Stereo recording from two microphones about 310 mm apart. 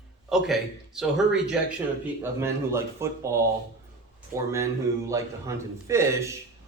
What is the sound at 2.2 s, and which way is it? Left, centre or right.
A man's voice, centre.